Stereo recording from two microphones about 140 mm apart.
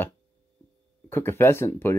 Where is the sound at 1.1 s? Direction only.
15° left (ahead or behind).